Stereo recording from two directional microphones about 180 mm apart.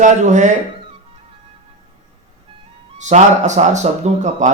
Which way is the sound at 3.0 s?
40° right (ahead or behind).